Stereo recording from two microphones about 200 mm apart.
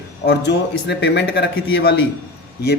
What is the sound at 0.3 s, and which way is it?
A man's voice, 60° left (ahead or behind).